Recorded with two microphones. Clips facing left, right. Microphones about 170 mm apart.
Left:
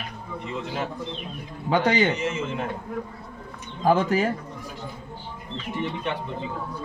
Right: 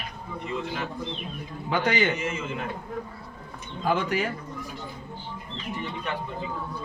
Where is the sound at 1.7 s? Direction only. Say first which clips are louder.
Left 4 dB; 35° left (ahead or behind).